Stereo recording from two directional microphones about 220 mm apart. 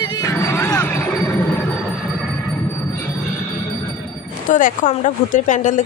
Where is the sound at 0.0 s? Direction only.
20° left (ahead or behind).